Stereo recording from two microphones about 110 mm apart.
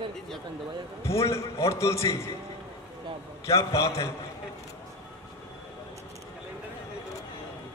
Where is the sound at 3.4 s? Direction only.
30° left (ahead or behind).